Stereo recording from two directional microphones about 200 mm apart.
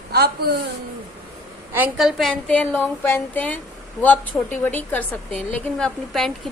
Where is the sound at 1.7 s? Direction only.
5° right (ahead or behind).